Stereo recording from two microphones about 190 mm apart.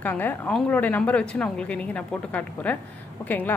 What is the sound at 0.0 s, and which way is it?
A woman's voice, 10° left (ahead or behind).